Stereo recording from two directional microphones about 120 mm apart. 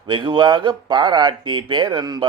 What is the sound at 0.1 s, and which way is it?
A man's voice, 40° right (ahead or behind).